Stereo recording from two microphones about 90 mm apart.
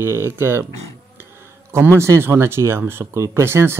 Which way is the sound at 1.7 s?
30° right (ahead or behind).